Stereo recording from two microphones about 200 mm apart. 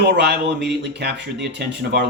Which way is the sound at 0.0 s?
60° right (ahead or behind).